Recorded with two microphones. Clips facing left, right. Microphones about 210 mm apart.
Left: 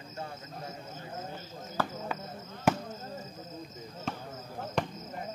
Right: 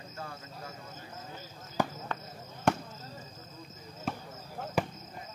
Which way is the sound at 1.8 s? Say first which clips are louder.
Right 2 dB; 15° right (ahead or behind).